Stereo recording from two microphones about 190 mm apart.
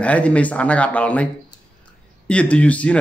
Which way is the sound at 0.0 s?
5° left (ahead or behind).